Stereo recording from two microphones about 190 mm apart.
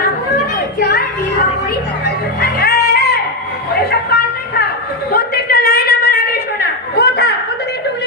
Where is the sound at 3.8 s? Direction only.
55° left (ahead or behind).